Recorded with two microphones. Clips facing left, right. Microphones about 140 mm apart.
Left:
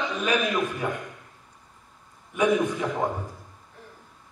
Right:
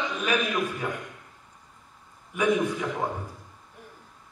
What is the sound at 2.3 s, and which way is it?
Speech, 15° left (ahead or behind).